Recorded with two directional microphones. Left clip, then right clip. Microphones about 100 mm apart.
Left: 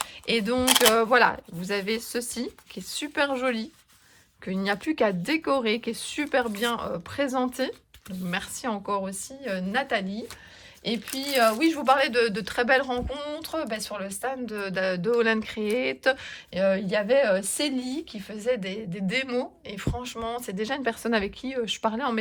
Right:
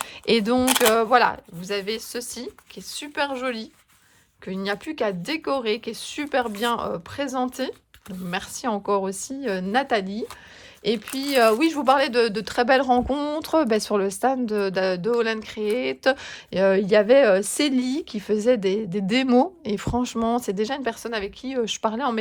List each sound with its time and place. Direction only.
0.3 s a woman's voice: 40° right (ahead or behind)
10.8 s speech: 70° right (ahead or behind); by 16.1 s 25° right (ahead or behind)
16.2 s a woman's voice: 50° right (ahead or behind)
16.6 s speech: 70° right (ahead or behind)
18.4 s a woman's voice: 45° right (ahead or behind); by 21.5 s 20° right (ahead or behind)
21.5 s speech: 40° right (ahead or behind)